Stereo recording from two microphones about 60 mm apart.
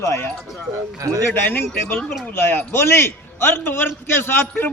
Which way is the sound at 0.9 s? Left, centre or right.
Right.